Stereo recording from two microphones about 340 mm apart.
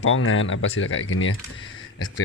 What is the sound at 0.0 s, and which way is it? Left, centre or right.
Speech, left.